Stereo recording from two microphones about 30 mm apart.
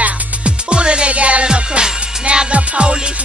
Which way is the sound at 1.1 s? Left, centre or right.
Right.